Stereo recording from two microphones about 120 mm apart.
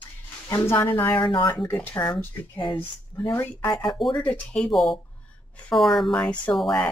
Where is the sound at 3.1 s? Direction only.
25° left (ahead or behind).